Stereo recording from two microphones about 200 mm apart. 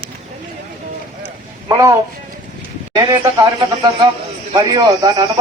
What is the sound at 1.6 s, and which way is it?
A man's voice, 20° right (ahead or behind).